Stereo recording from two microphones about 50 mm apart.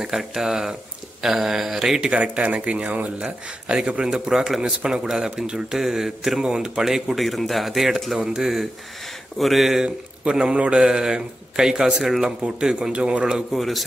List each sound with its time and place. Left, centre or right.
0.0 s speech: centre
2.0 s speech: right; by 9.8 s centre
10.2 s speech: centre
13.6 s speech: centre